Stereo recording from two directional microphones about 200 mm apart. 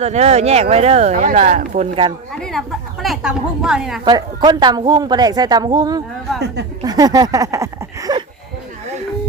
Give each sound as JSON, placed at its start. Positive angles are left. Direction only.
{"t": 0.0, "sound": "speech", "side_deg": -35}
{"t": 2.3, "sound": "a woman's voice", "side_deg": 0}
{"t": 4.0, "sound": "a woman's voice", "side_deg": -20}